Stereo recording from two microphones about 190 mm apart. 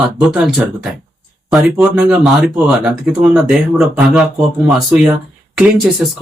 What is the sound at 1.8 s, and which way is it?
Speech, 5° right (ahead or behind).